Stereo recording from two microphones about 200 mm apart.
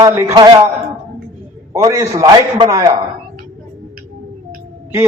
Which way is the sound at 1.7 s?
15° right (ahead or behind).